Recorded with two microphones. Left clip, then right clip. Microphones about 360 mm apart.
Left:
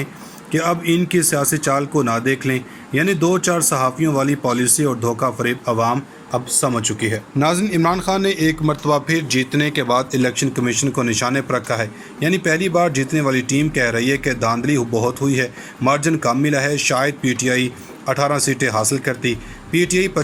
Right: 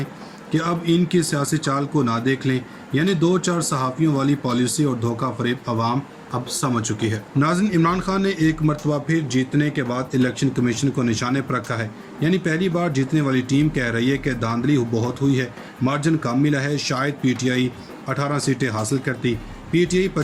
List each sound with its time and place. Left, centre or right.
0.5 s speech: centre